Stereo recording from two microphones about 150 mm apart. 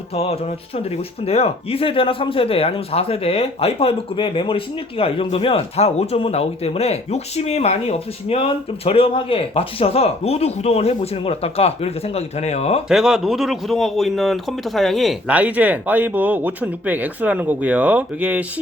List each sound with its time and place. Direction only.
0.1 s speech: 45° left (ahead or behind)
12.9 s speech: 5° right (ahead or behind)